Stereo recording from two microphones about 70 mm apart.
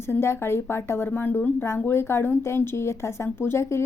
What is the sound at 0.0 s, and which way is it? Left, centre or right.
A woman's voice, left.